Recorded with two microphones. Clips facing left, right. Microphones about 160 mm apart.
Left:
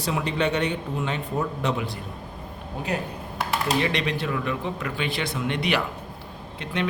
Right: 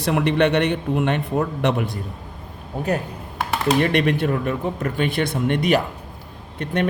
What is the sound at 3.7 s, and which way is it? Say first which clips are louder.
Speech: right 8 dB; 55° right (ahead or behind).